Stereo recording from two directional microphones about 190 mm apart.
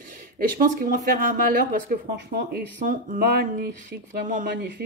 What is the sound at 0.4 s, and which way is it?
Speech, 50° right (ahead or behind).